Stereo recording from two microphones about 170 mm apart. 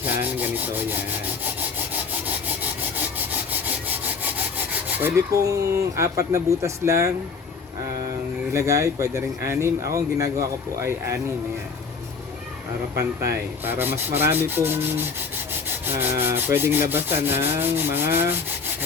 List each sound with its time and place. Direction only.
0.0 s rub: 10° right (ahead or behind)
3.5 s wood: 10° right (ahead or behind)
4.9 s rub: 15° right (ahead or behind)
8.5 s rub: 20° right (ahead or behind)
13.7 s rub: 10° right (ahead or behind)